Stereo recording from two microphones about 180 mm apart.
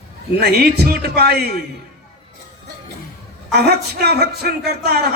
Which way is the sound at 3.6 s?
65° right (ahead or behind).